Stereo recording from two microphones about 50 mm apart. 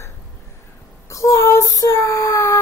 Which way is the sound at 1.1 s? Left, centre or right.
Left.